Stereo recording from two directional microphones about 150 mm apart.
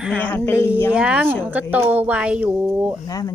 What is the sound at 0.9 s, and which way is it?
A woman's voice, 10° right (ahead or behind).